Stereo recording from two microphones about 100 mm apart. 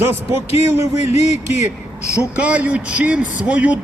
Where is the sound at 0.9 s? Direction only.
90° left.